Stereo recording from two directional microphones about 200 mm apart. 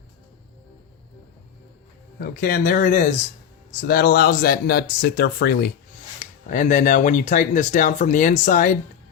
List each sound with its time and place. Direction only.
2.2 s speech: 45° left (ahead or behind)
6.1 s speech: 40° left (ahead or behind)